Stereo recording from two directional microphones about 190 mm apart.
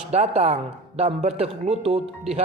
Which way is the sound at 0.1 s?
35° right (ahead or behind).